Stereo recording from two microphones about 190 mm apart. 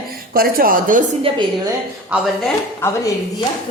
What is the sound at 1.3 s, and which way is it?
Speech, 30° right (ahead or behind).